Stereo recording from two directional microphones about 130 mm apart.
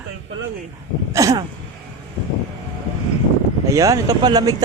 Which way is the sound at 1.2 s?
25° right (ahead or behind).